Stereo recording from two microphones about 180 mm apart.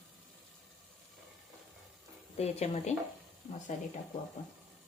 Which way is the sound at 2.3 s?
35° left (ahead or behind).